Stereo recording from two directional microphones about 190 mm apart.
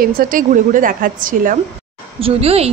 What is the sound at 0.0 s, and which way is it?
A woman's voice, 50° right (ahead or behind).